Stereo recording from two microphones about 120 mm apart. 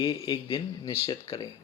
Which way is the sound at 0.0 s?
50° left (ahead or behind).